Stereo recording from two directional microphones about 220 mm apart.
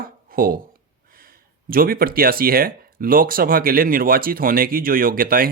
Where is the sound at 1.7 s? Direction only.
40° right (ahead or behind).